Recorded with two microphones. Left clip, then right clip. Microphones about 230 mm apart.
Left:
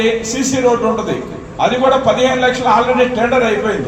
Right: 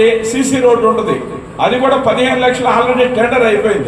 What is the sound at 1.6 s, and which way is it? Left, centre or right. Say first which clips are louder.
A man's voice: right 1 dB; right.